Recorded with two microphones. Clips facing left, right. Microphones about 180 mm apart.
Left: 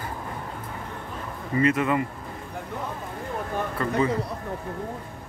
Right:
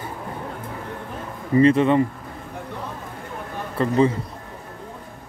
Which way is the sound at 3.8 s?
25° right (ahead or behind).